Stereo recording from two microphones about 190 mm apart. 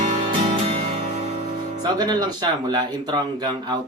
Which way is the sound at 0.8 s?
35° right (ahead or behind).